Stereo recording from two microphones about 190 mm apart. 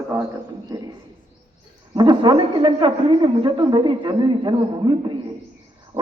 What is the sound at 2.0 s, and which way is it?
A man's voice, 25° right (ahead or behind).